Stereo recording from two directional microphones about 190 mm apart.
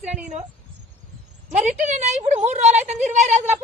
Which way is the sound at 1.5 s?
40° right (ahead or behind).